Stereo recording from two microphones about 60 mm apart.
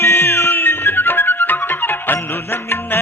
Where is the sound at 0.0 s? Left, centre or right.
Left.